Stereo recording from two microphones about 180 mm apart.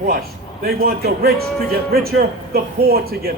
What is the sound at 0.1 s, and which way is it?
A man's voice, 55° right (ahead or behind).